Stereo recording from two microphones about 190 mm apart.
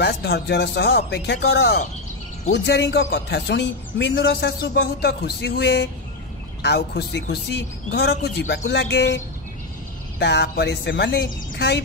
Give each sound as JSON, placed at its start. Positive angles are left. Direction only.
{"t": 0.0, "sound": "a man's voice", "side_deg": 60}